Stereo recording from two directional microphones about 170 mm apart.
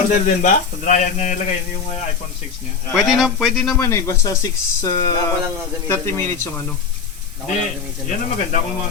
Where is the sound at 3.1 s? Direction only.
Centre (ahead or behind).